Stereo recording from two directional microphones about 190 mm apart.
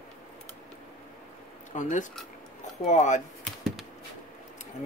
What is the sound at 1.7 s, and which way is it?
Speech, 40° left (ahead or behind).